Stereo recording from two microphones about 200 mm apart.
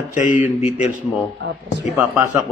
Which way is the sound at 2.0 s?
5° right (ahead or behind).